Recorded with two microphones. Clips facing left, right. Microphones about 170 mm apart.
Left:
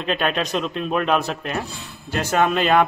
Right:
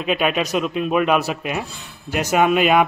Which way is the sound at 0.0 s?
5° right (ahead or behind).